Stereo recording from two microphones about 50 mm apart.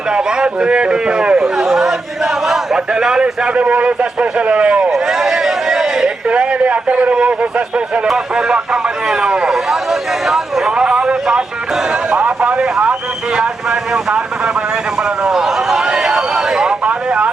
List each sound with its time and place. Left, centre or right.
0.1 s a man's voice: centre
1.6 s chatter: centre
2.5 s a man's voice: centre
4.9 s a sound: centre
6.3 s a man's voice: right
8.0 s speech: centre
10.8 s a man's voice: centre
12.1 s a man's voice: right
15.3 s a sound: centre